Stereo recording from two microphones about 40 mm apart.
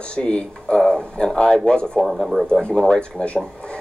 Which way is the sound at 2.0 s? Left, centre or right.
Centre.